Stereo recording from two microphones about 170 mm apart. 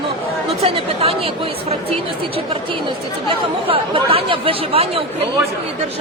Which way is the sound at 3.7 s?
35° right (ahead or behind).